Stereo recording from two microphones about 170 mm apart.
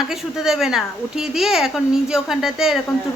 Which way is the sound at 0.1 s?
5° right (ahead or behind).